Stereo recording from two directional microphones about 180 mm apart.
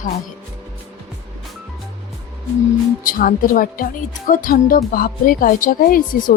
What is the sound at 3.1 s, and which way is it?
Speech, 55° left (ahead or behind).